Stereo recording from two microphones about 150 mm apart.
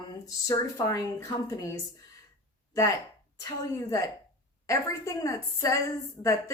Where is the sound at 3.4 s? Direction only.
20° left (ahead or behind).